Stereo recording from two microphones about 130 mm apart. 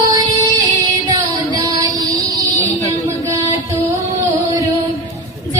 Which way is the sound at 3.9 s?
25° right (ahead or behind).